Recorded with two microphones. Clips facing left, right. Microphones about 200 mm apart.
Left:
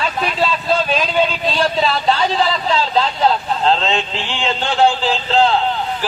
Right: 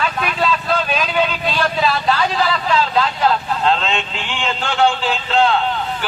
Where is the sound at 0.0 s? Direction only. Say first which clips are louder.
Left 1 dB; 30° left (ahead or behind).